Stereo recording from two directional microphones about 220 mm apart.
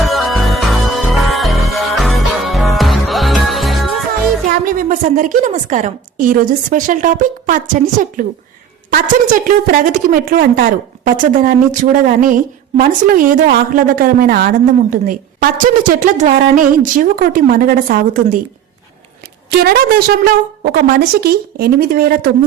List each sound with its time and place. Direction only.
0.0 s music: centre (ahead or behind)
4.6 s a woman's voice: 35° right (ahead or behind)
19.5 s a woman's voice: 45° right (ahead or behind)